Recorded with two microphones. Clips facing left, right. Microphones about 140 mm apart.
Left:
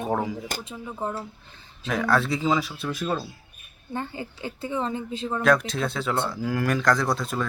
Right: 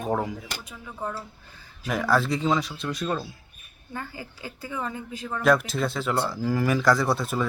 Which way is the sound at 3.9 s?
25° left (ahead or behind).